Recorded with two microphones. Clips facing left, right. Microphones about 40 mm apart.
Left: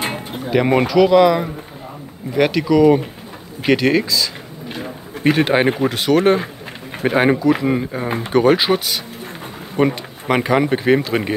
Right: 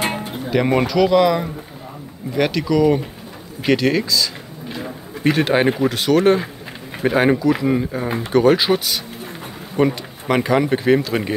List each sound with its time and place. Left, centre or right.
0.5 s speech: centre; by 11.3 s left